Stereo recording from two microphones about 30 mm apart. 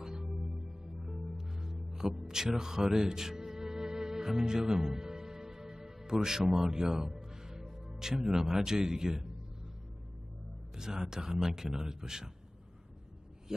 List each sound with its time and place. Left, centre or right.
0.0 s music: centre
6.5 s a man's voice: right
10.8 s speech: centre